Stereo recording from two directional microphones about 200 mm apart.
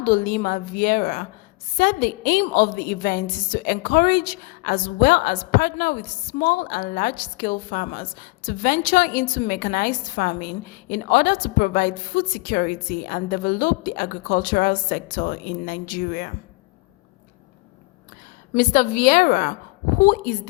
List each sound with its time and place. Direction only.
0.0 s a woman's voice: 45° left (ahead or behind)
18.5 s a woman's voice: 45° left (ahead or behind)